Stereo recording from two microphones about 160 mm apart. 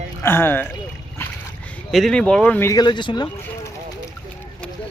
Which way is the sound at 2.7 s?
30° left (ahead or behind).